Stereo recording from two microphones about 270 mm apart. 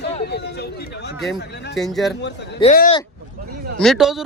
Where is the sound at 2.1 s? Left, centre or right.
Left.